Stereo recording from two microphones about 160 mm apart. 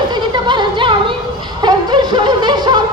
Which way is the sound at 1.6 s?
25° right (ahead or behind).